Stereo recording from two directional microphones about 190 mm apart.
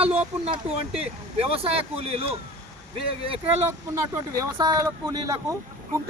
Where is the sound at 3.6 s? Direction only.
15° right (ahead or behind).